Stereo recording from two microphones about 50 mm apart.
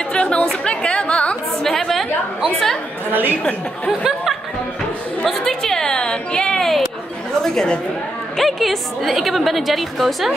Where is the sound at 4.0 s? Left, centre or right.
Centre.